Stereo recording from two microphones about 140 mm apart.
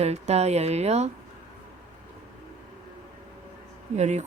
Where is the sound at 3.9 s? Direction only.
55° right (ahead or behind).